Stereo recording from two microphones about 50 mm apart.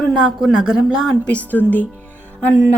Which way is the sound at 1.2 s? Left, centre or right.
Left.